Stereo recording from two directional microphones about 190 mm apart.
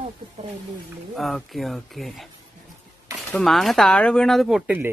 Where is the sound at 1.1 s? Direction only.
Centre (ahead or behind).